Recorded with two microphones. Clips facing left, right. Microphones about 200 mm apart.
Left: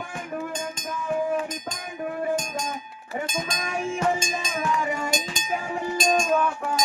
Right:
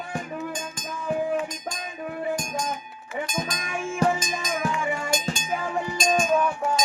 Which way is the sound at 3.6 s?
40° left (ahead or behind).